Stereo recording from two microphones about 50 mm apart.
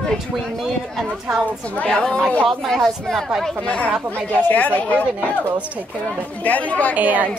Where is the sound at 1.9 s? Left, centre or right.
Centre.